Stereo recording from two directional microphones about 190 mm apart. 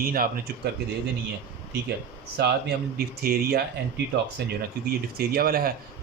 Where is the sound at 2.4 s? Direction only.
60° right (ahead or behind).